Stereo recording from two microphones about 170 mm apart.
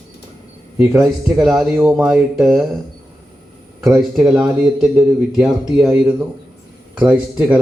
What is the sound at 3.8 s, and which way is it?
Speech, 5° right (ahead or behind).